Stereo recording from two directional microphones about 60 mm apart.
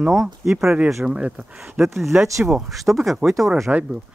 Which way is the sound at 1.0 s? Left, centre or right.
Centre.